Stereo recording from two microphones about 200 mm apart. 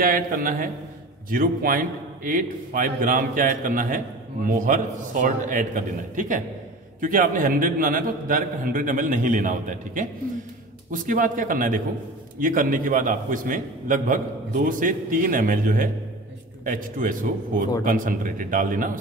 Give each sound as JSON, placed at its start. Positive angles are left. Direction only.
{"t": 0.0, "sound": "a man's voice", "side_deg": -45}